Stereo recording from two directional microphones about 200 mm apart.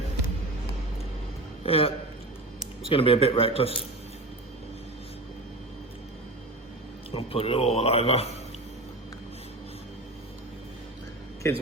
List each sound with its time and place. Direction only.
1.6 s a man's voice: 30° left (ahead or behind)
2.9 s a man's voice: 30° left (ahead or behind)
7.1 s a man's voice: 30° left (ahead or behind)